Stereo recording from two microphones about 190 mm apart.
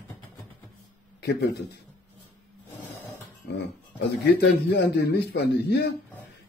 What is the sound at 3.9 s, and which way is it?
A man's voice, 65° left (ahead or behind).